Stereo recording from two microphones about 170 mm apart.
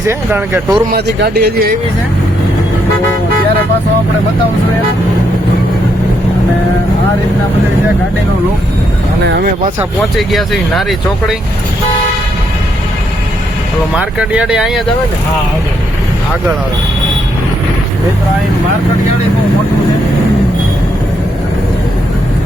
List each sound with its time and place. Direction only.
0.0 s speech: 15° right (ahead or behind)
0.9 s speech: 75° right (ahead or behind)
9.2 s speech: 85° right
10.2 s speech: centre (ahead or behind)
13.9 s speech: 5° right (ahead or behind)